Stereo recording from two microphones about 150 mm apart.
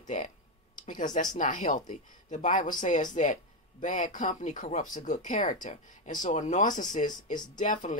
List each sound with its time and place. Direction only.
0.0 s speech: 55° left (ahead or behind)